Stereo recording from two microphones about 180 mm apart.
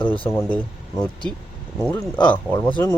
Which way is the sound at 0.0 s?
30° left (ahead or behind).